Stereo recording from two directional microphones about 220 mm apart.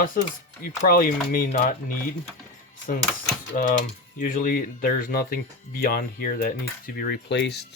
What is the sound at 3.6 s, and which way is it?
Speech, 40° left (ahead or behind).